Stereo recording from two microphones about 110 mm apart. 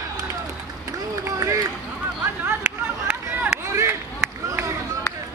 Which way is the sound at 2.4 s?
15° right (ahead or behind).